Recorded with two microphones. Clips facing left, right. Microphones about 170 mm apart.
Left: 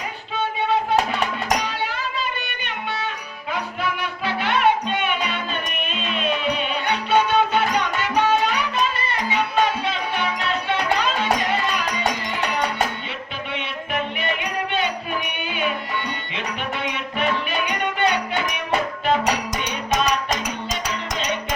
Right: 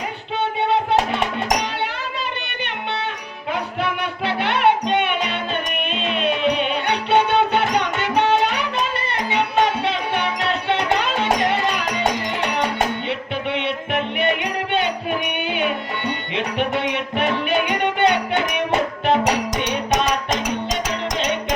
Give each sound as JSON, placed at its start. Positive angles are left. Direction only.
{"t": 3.5, "sound": "music", "side_deg": -60}
{"t": 13.5, "sound": "music", "side_deg": -65}